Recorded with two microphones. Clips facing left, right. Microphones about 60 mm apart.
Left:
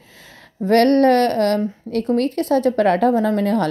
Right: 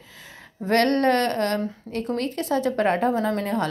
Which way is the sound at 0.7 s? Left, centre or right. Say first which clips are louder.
Left 6 dB; left.